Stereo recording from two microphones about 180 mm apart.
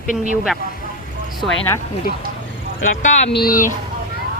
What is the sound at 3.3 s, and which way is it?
Speech, 55° left (ahead or behind).